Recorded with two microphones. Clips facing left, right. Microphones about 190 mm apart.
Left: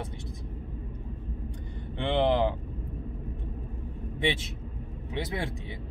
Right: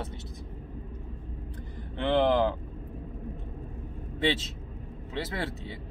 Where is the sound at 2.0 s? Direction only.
15° left (ahead or behind).